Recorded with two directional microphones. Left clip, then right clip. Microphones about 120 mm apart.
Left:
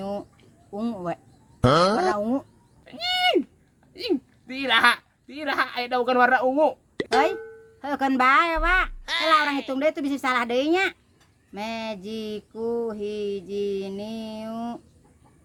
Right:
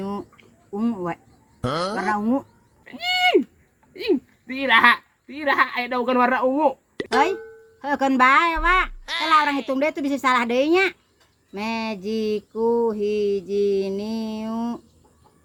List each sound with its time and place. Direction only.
0.8 s speech: 30° left (ahead or behind)
1.6 s speech: centre (ahead or behind)
2.8 s horse: 25° left (ahead or behind)
3.9 s a woman's voice: 30° left (ahead or behind)
6.9 s a sound: 5° left (ahead or behind)
7.8 s mantra: 25° left (ahead or behind)
9.0 s speech: centre (ahead or behind)
9.7 s mantra: 20° left (ahead or behind)
11.5 s a sound: 15° left (ahead or behind)
12.7 s mantra: 15° left (ahead or behind)